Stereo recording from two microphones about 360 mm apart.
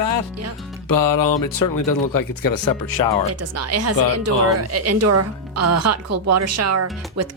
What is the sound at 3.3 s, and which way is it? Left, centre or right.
Speech, right.